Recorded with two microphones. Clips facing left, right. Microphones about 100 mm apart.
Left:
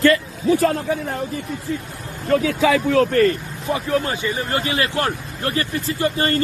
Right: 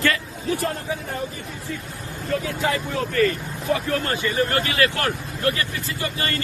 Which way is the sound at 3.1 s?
45° left (ahead or behind).